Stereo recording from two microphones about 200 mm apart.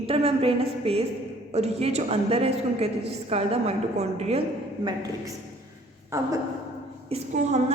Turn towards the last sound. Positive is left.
turn(degrees=-35)  # may be behind; listen again after turning